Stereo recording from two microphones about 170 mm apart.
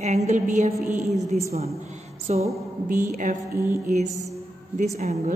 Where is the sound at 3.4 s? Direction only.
15° right (ahead or behind).